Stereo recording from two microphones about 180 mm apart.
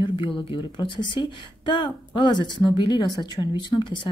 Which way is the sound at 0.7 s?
25° left (ahead or behind).